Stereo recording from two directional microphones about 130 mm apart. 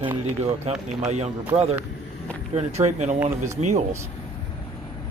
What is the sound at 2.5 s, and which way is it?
Speech, 60° right (ahead or behind).